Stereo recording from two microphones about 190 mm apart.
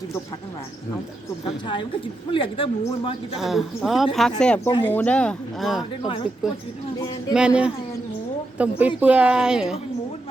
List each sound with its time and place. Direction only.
1.6 s speech: 25° left (ahead or behind)
3.3 s speech: centre (ahead or behind)
7.3 s speech: 5° right (ahead or behind)